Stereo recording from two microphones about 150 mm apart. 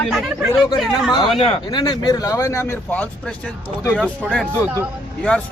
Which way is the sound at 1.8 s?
25° left (ahead or behind).